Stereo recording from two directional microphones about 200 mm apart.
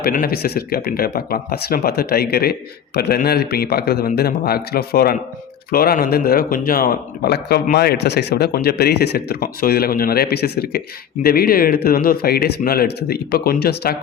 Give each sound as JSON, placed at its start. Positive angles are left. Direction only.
{"t": 0.0, "sound": "a man's voice", "side_deg": 45}